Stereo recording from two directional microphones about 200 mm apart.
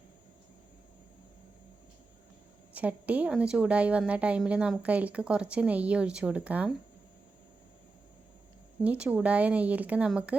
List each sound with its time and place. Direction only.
2.7 s a woman's voice: 10° right (ahead or behind)
8.8 s a woman's voice: 5° right (ahead or behind)